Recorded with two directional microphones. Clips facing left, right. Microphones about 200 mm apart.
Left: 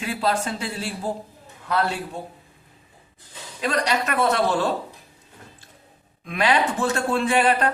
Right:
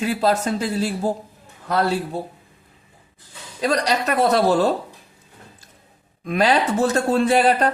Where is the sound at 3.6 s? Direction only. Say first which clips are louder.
Right 3 dB; 35° right (ahead or behind).